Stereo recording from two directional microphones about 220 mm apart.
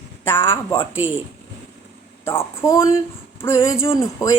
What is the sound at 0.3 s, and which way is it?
Speech, 10° left (ahead or behind).